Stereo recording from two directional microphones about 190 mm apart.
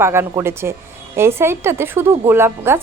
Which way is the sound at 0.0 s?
15° right (ahead or behind).